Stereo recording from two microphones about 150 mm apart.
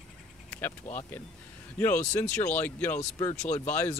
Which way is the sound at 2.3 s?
10° left (ahead or behind).